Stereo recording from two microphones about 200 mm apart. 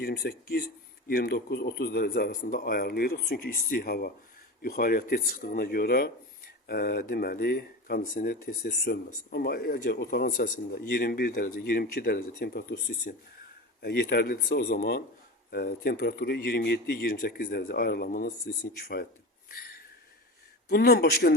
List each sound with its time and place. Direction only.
0.0 s speech: 50° left (ahead or behind)
19.5 s a sound: 50° left (ahead or behind)
20.7 s speech: 50° left (ahead or behind)